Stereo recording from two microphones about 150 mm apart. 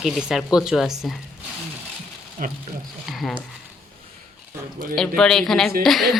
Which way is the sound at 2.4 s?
60° right (ahead or behind).